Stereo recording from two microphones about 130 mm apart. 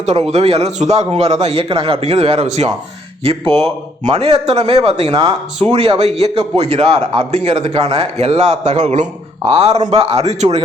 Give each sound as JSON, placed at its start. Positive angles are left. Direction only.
{"t": 0.0, "sound": "a man's voice", "side_deg": -60}
{"t": 9.5, "sound": "a man's voice", "side_deg": -50}